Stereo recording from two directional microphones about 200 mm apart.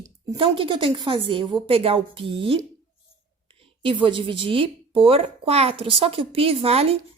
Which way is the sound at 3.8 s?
25° right (ahead or behind).